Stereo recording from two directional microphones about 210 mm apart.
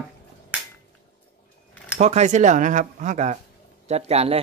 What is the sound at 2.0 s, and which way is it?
Speech, 35° right (ahead or behind).